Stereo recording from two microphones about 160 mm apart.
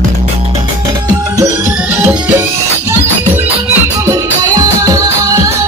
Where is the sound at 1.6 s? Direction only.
10° right (ahead or behind).